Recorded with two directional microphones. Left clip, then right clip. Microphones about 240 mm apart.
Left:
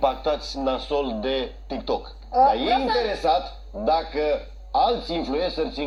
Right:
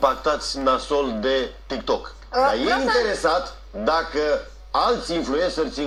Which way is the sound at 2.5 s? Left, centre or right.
Centre.